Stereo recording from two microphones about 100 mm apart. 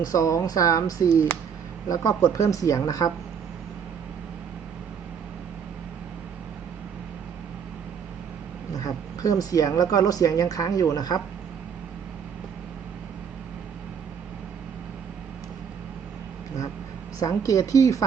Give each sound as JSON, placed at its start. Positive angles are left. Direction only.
{"t": 0.1, "sound": "speech", "side_deg": 35}
{"t": 8.7, "sound": "speech", "side_deg": 40}
{"t": 17.2, "sound": "speech", "side_deg": 35}